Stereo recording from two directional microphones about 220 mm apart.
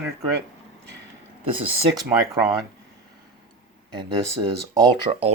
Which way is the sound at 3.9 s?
20° right (ahead or behind).